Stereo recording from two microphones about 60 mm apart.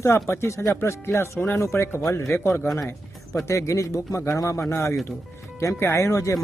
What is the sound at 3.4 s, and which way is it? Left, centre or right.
Speech, left.